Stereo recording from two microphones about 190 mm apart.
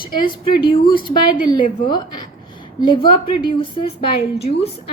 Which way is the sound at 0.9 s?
50° left (ahead or behind).